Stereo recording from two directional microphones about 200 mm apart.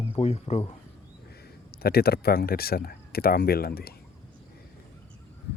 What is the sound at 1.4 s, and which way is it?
Speech, 50° left (ahead or behind).